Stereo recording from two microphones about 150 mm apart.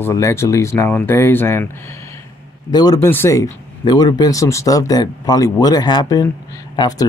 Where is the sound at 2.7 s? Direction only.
25° left (ahead or behind).